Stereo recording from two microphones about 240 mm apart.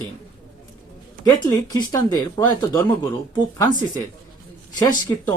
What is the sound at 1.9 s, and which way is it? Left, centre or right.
Speech, centre.